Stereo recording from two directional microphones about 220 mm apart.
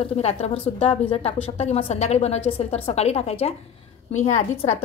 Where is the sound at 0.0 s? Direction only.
30° left (ahead or behind).